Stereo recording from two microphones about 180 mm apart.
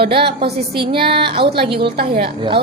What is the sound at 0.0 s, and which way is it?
Speech, 30° right (ahead or behind).